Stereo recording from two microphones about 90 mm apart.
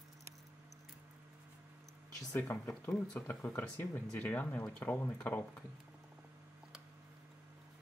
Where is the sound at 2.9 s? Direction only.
10° left (ahead or behind).